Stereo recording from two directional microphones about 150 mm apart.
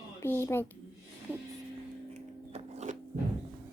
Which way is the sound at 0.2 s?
15° left (ahead or behind).